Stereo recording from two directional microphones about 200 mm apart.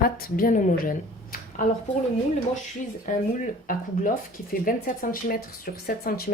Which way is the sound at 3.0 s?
40° left (ahead or behind).